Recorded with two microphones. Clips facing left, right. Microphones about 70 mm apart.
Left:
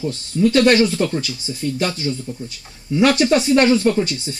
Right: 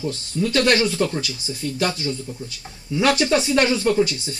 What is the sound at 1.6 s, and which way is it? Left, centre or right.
Speech, left.